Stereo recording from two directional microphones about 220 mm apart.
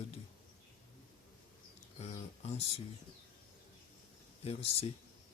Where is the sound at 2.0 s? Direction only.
30° left (ahead or behind).